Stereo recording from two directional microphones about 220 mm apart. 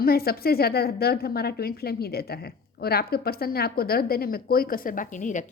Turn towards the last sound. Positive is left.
turn(degrees=35)  # may be behind; listen again after turning